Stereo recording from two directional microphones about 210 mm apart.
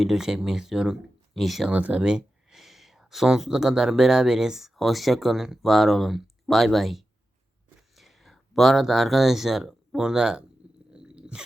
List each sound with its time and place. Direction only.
0.0 s speech: centre (ahead or behind)
10.9 s sneeze: 5° right (ahead or behind)